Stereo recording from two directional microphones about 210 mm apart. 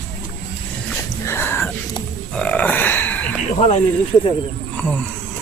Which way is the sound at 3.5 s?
30° left (ahead or behind).